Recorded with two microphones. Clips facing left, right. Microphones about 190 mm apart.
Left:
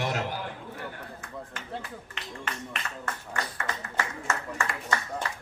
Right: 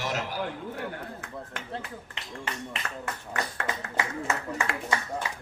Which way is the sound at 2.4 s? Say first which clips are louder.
Right 1 dB; 20° right (ahead or behind).